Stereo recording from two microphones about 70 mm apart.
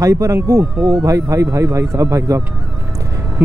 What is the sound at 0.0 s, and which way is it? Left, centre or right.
A man's voice, right.